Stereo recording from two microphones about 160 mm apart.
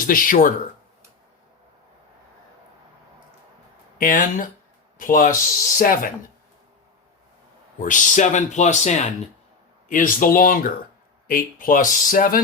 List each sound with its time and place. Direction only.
0.1 s speech: 60° left (ahead or behind)
3.9 s speech: 55° left (ahead or behind)
7.8 s speech: 55° left (ahead or behind)
9.9 s speech: 55° left (ahead or behind)